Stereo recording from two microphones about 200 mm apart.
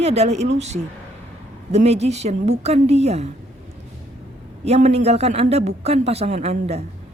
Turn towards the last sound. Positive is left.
turn(degrees=-30)  # may be behind; listen again after turning